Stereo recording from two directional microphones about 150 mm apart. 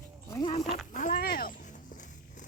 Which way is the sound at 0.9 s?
65° left (ahead or behind).